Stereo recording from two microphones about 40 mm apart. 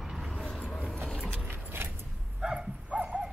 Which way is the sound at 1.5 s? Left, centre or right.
Right.